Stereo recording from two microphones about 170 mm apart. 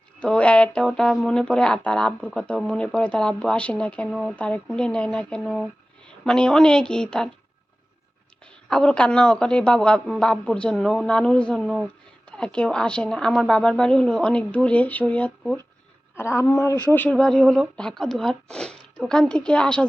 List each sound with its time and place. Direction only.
0.2 s speech: 5° left (ahead or behind)
8.7 s speech: 5° left (ahead or behind)